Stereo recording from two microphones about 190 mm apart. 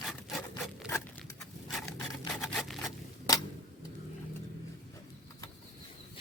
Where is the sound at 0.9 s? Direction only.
10° left (ahead or behind).